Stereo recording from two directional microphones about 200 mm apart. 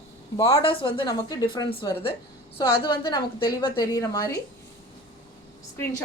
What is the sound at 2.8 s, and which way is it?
A woman's voice, 20° left (ahead or behind).